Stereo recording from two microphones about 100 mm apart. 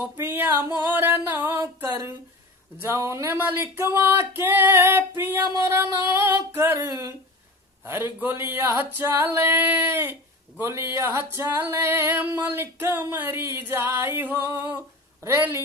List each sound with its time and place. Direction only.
0.2 s music: 20° right (ahead or behind)
2.8 s a sound: 25° right (ahead or behind)
14.8 s speech: 25° right (ahead or behind)